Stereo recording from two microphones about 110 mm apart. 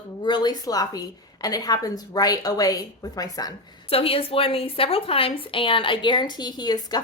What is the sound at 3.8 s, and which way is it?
A woman's voice, 60° left (ahead or behind).